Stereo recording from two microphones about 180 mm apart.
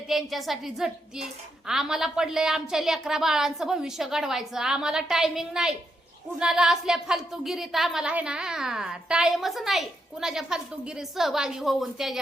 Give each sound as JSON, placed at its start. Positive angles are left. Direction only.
{"t": 0.1, "sound": "a woman's voice", "side_deg": 0}